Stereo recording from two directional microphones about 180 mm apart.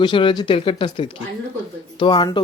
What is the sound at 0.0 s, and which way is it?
Speech, 25° left (ahead or behind).